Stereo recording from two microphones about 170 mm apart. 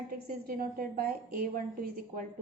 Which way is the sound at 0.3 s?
60° right (ahead or behind).